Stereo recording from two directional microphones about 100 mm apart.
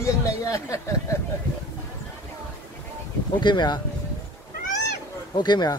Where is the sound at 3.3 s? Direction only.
50° left (ahead or behind).